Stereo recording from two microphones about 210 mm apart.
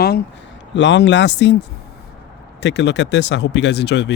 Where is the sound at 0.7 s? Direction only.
60° left (ahead or behind).